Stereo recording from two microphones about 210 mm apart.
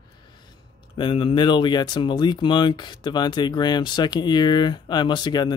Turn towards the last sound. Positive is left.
turn(degrees=20)  # may be behind; listen again after turning